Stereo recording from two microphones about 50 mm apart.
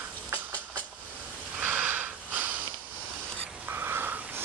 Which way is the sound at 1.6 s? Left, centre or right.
Right.